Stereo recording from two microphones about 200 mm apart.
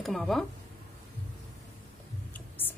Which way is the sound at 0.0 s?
Centre (ahead or behind).